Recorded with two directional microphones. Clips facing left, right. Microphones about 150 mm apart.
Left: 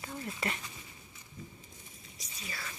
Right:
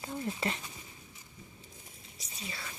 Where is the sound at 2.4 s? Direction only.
25° right (ahead or behind).